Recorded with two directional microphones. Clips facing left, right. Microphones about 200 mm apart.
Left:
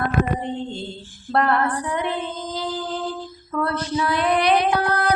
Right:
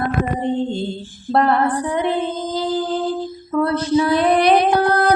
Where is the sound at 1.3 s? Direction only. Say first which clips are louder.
Right 4 dB; 30° right (ahead or behind).